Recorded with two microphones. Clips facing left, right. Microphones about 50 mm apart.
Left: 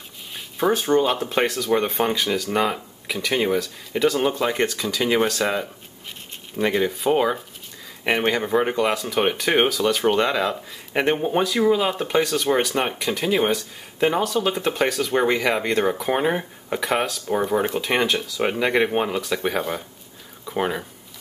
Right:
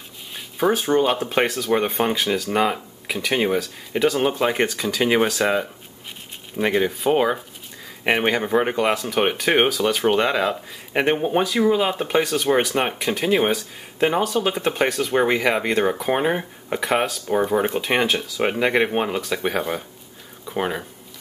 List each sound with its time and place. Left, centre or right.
0.6 s speech: centre